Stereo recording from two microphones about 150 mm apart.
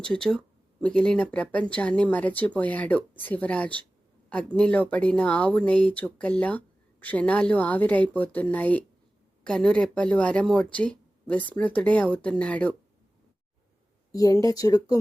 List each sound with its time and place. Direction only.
0.0 s speech: 5° left (ahead or behind)
14.1 s speech: 25° left (ahead or behind)